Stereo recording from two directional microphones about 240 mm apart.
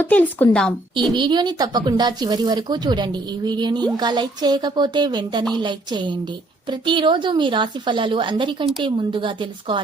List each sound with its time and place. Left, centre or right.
0.0 s a woman's voice: centre
1.1 s a woman's voice: centre